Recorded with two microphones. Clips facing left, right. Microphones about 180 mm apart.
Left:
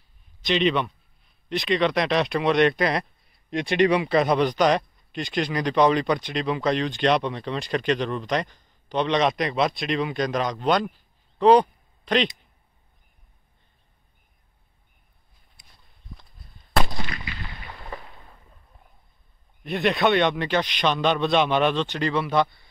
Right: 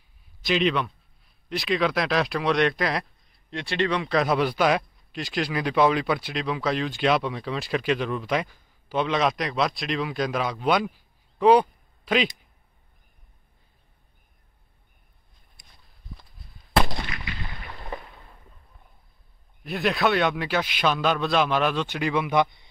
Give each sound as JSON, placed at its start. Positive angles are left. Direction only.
{"t": 0.4, "sound": "a man's voice", "side_deg": -5}
{"t": 3.4, "sound": "a man's voice", "side_deg": 15}
{"t": 19.6, "sound": "a man's voice", "side_deg": 0}